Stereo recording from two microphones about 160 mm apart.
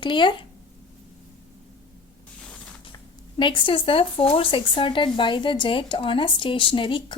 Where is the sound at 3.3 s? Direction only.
30° left (ahead or behind).